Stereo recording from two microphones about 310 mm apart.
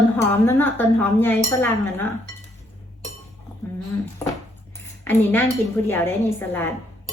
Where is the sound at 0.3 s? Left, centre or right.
Centre.